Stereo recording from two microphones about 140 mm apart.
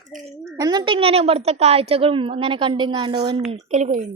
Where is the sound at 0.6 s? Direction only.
30° right (ahead or behind).